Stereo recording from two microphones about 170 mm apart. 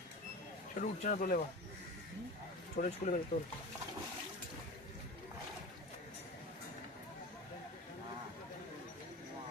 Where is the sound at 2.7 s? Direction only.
50° left (ahead or behind).